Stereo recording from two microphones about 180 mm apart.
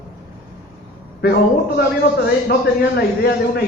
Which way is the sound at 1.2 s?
65° left (ahead or behind).